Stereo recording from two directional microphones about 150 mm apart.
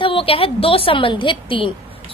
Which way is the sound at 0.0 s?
35° left (ahead or behind).